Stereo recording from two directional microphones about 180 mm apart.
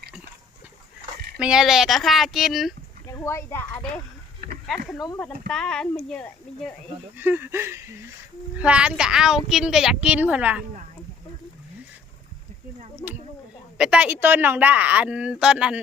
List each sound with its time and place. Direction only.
1.4 s speech: 5° right (ahead or behind)
3.1 s speech: 15° left (ahead or behind)
4.6 s speech: centre (ahead or behind)
7.2 s a woman's voice: 10° right (ahead or behind)
13.7 s a woman's voice: 5° right (ahead or behind)